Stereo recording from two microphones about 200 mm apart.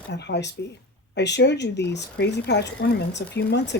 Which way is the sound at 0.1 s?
60° left (ahead or behind).